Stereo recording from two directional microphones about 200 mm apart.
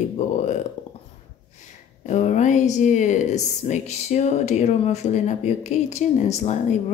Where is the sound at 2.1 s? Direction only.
35° left (ahead or behind).